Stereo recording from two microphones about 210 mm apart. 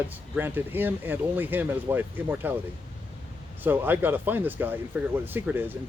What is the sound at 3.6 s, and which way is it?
Speech, 10° right (ahead or behind).